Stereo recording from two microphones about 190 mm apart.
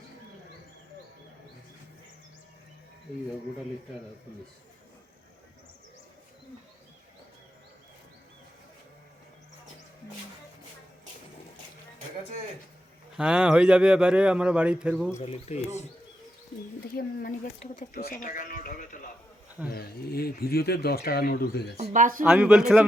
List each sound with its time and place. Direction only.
13.1 s a man's voice: 5° right (ahead or behind)
15.2 s speech: 35° left (ahead or behind)
16.8 s speech: 50° left (ahead or behind)
21.8 s speech: 40° right (ahead or behind)
22.2 s a man's voice: 5° right (ahead or behind)